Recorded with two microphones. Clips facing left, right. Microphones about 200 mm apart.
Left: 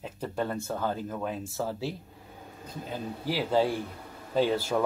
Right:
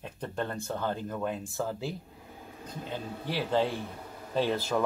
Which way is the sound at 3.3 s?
10° left (ahead or behind).